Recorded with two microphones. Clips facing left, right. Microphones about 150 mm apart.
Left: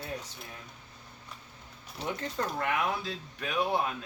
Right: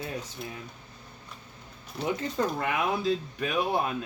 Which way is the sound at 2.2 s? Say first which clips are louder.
Right 4 dB; 10° right (ahead or behind).